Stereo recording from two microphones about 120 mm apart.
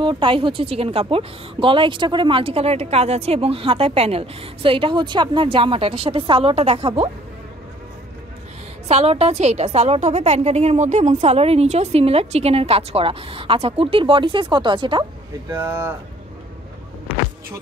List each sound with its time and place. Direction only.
0.0 s a woman's voice: 45° right (ahead or behind)
8.8 s a woman's voice: 60° right (ahead or behind); by 15.0 s 40° right (ahead or behind)
15.5 s speech: 20° right (ahead or behind)